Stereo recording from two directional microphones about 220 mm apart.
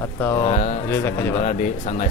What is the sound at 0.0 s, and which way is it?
Speech, 15° left (ahead or behind).